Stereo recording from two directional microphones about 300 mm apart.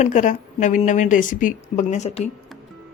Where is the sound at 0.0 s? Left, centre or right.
Left.